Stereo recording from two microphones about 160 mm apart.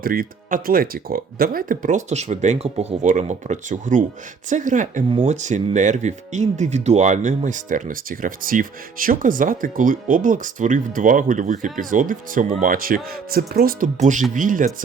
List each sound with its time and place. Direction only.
0.0 s speech: 65° right (ahead or behind)